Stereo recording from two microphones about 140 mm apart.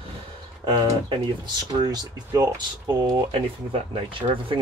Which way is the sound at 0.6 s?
30° right (ahead or behind).